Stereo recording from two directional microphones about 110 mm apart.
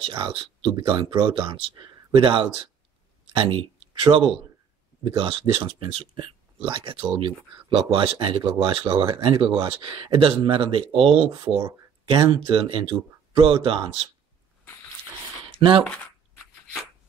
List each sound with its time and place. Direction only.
0.3 s speech: 55° right (ahead or behind)
12.1 s speech: 45° right (ahead or behind)
15.6 s speech: 50° right (ahead or behind)